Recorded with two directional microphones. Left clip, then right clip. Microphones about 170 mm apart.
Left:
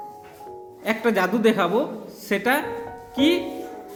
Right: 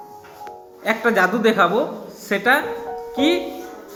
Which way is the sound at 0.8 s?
40° left (ahead or behind).